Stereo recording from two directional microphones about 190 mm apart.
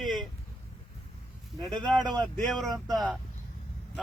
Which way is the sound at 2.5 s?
Centre (ahead or behind).